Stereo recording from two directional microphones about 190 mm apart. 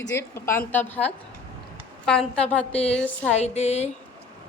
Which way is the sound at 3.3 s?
35° left (ahead or behind).